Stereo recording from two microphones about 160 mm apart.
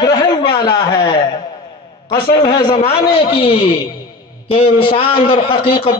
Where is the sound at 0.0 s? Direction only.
25° left (ahead or behind).